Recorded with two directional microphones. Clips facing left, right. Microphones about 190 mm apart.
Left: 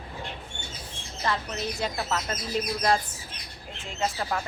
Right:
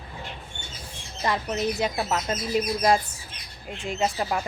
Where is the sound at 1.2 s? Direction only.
15° right (ahead or behind).